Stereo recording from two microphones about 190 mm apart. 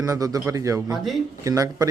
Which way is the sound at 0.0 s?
20° right (ahead or behind).